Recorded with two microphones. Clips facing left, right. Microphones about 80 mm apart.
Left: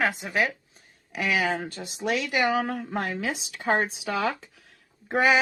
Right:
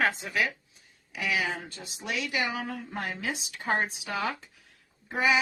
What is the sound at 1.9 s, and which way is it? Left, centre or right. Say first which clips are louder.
Speech: left 6 dB; left.